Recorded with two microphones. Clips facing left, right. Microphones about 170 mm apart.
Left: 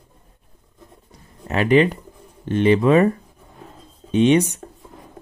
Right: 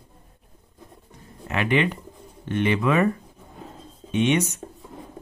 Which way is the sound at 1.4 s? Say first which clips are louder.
Left 7 dB; 35° left (ahead or behind).